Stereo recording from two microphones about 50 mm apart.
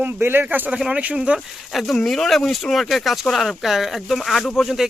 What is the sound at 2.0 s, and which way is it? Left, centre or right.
Speech, centre.